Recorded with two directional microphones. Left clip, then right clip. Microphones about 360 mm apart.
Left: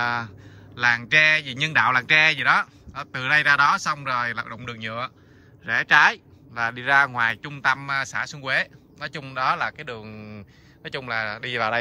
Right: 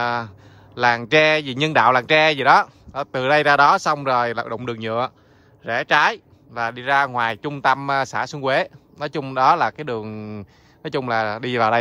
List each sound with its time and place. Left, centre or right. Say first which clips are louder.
0.0 s speech: right 2 dB; centre